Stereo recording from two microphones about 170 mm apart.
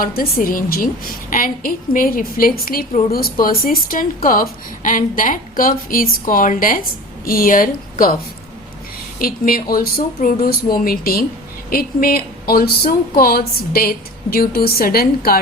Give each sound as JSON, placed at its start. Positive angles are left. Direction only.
{"t": 0.0, "sound": "a woman's voice", "side_deg": 60}
{"t": 9.1, "sound": "a woman's voice", "side_deg": 55}